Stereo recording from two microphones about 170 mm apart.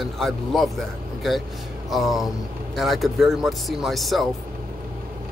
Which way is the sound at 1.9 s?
Centre (ahead or behind).